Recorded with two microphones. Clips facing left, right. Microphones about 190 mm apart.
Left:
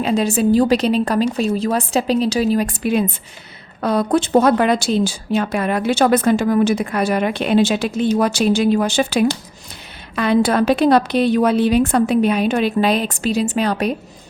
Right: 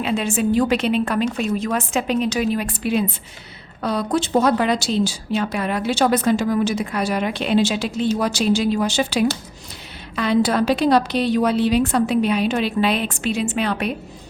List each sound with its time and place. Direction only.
0.0 s a woman's voice: 40° left (ahead or behind)